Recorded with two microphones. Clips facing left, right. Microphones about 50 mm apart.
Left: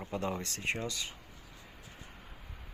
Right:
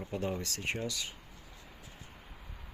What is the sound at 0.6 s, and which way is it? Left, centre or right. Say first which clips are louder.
Speech: left 1 dB; left.